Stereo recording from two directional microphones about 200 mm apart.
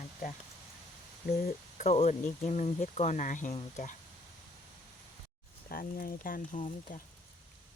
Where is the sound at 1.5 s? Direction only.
35° left (ahead or behind).